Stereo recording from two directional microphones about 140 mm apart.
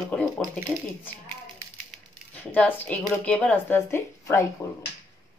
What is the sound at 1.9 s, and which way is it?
Coin, 10° left (ahead or behind).